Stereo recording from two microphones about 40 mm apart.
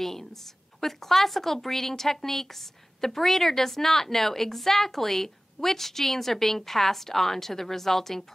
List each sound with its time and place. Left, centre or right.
0.0 s a woman's voice: centre